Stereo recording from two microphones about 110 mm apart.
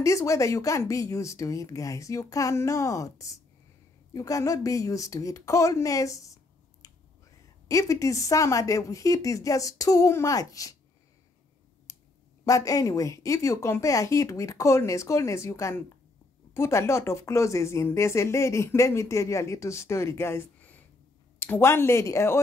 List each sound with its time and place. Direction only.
0.0 s a woman's voice: 30° left (ahead or behind)
11.9 s clicking: 30° left (ahead or behind)
12.4 s speech: 30° left (ahead or behind)